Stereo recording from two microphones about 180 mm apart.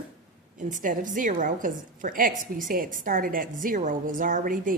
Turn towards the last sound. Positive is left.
turn(degrees=-50)  # may be behind; listen again after turning